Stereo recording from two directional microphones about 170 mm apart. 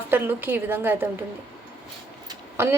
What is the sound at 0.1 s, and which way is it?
Speech, 10° right (ahead or behind).